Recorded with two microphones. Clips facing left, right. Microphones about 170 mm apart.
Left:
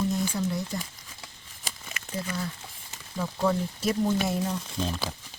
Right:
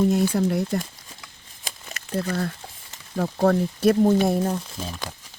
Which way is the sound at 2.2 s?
55° right (ahead or behind).